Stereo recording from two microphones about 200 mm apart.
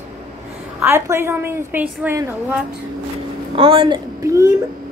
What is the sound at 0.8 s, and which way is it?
A woman's voice, 10° right (ahead or behind).